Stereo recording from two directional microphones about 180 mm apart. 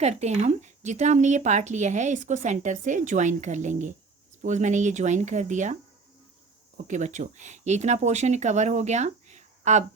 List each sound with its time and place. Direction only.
0.0 s a woman's voice: 40° right (ahead or behind)
6.8 s a woman's voice: 45° right (ahead or behind)